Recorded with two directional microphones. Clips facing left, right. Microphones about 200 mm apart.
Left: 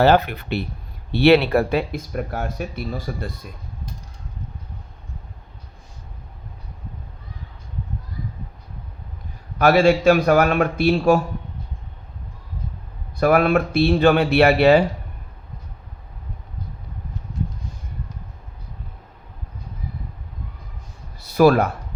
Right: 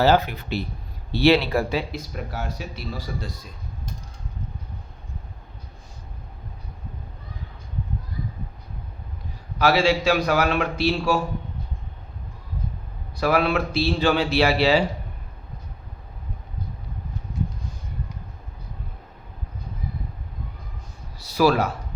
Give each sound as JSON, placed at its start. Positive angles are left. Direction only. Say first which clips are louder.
{"t": 0.0, "sound": "speech", "louder": "left 3 dB", "side_deg": 60}
{"t": 9.6, "sound": "a man's voice", "louder": "left 5 dB", "side_deg": 55}
{"t": 13.1, "sound": "speech", "louder": "left 5 dB", "side_deg": 50}
{"t": 21.2, "sound": "speech", "louder": "left 5 dB", "side_deg": 55}